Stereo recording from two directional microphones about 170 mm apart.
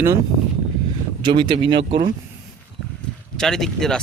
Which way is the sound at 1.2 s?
30° right (ahead or behind).